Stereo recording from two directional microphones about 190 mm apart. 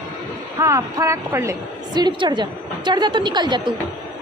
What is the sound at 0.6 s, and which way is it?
A woman's voice, 15° right (ahead or behind).